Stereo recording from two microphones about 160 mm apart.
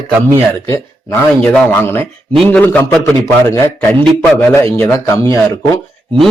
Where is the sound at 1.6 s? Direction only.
15° left (ahead or behind).